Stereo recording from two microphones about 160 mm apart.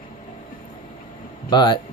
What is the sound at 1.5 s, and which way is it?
Speech, 30° left (ahead or behind).